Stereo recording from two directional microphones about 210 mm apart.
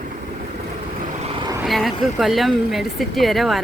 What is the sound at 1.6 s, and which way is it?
Speech, centre (ahead or behind).